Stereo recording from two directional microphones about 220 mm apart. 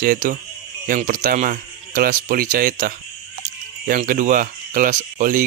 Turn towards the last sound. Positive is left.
turn(degrees=-35)  # may be behind; listen again after turning